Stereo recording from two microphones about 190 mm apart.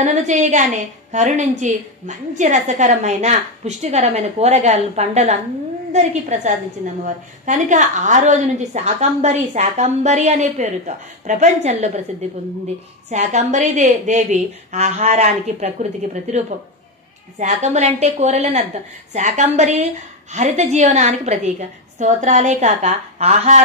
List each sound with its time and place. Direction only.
0.0 s a woman's voice: 40° right (ahead or behind)
13.1 s a woman's voice: 35° right (ahead or behind)